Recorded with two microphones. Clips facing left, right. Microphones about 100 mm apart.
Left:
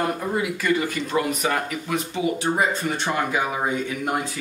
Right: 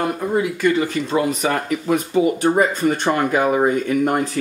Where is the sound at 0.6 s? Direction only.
30° right (ahead or behind).